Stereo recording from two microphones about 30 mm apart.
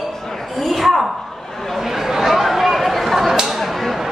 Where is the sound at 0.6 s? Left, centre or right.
Centre.